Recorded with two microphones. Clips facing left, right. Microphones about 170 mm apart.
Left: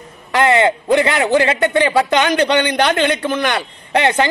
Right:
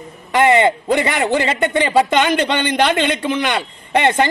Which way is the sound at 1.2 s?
Centre (ahead or behind).